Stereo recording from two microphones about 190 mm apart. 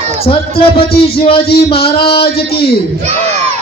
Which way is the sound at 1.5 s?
55° left (ahead or behind).